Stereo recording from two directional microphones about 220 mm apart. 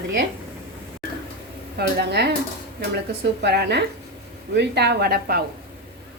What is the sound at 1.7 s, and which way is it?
A woman's voice, 50° right (ahead or behind).